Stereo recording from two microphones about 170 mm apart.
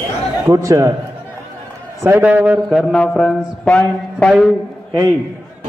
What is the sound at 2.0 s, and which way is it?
A man's voice, 10° right (ahead or behind).